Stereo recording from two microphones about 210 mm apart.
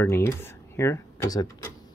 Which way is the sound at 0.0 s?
10° left (ahead or behind).